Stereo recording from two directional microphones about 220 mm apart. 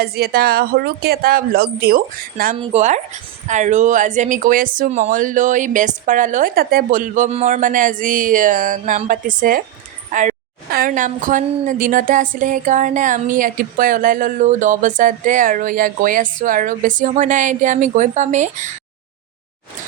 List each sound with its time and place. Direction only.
0.0 s speech: 45° right (ahead or behind)
2.6 s a woman's voice: 30° right (ahead or behind)